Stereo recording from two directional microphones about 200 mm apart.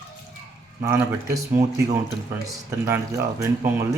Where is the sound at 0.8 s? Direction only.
10° right (ahead or behind).